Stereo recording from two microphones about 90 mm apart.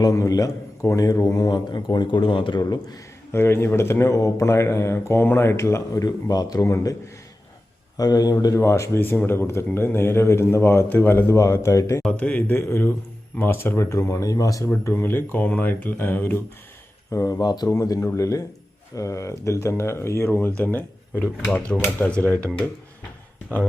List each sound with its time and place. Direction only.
0.0 s a man's voice: 40° left (ahead or behind)
3.3 s speech: 30° left (ahead or behind)
7.9 s a man's voice: 50° left (ahead or behind)
8.5 s speech: 35° left (ahead or behind)
12.1 s speech: 15° left (ahead or behind); by 14.7 s 40° left (ahead or behind)
14.7 s speech: 25° left (ahead or behind)
17.1 s speech: 35° left (ahead or behind)
17.4 s a man's voice: 50° left (ahead or behind)
17.7 s speech: 40° left (ahead or behind); by 22.4 s 15° left (ahead or behind)